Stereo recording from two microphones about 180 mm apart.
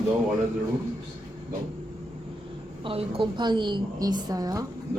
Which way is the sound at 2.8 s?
30° right (ahead or behind).